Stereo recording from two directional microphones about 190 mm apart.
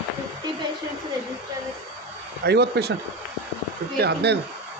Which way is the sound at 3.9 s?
60° right (ahead or behind).